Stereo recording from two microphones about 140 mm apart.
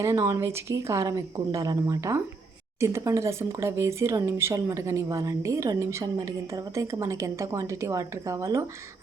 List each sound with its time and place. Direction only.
0.0 s speech: 20° right (ahead or behind)